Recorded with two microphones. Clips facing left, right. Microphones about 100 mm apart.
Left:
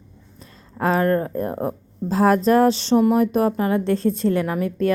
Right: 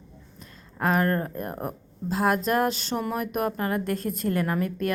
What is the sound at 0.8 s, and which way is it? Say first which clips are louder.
A woman's voice: left 5 dB; 30° left (ahead or behind).